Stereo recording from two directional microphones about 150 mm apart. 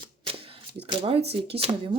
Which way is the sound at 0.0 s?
35° right (ahead or behind).